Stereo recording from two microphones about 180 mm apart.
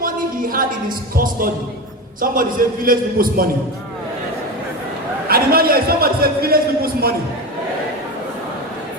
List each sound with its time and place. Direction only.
0.0 s a sound: 50° right (ahead or behind)
1.1 s a man's voice: 55° right (ahead or behind)
5.3 s a man's voice: 55° right (ahead or behind)